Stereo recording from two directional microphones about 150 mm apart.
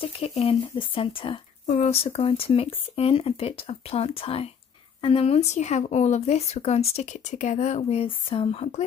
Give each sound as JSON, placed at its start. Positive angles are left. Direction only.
{"t": 0.0, "sound": "speech", "side_deg": 40}